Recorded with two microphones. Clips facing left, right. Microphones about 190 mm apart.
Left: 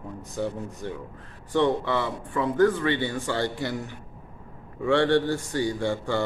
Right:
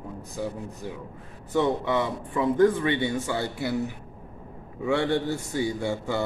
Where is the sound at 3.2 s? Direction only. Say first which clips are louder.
Left 1 dB; 10° right (ahead or behind).